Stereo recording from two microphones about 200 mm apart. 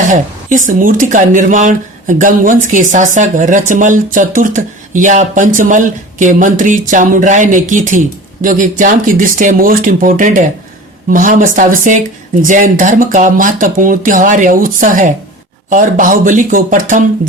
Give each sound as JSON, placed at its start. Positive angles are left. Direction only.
{"t": 0.1, "sound": "speech", "side_deg": -40}